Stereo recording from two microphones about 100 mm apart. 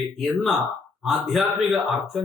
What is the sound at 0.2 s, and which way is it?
A man's voice, centre (ahead or behind).